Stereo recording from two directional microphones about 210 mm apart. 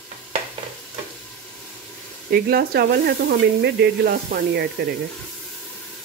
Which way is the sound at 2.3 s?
45° right (ahead or behind).